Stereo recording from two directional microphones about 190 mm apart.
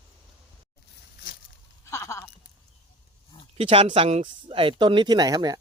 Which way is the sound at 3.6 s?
30° right (ahead or behind).